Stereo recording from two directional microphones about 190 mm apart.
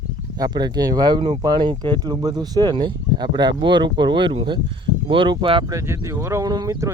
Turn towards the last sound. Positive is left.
turn(degrees=-15)  # may be behind; listen again after turning